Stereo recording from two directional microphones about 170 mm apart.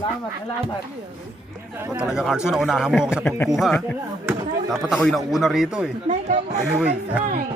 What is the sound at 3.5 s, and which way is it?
A man's voice, centre (ahead or behind).